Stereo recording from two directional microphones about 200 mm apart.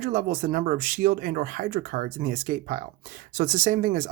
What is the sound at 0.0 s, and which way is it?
Speech, 45° right (ahead or behind).